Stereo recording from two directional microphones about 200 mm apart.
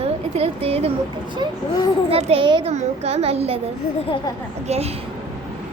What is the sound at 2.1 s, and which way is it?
A child's voice, 25° right (ahead or behind).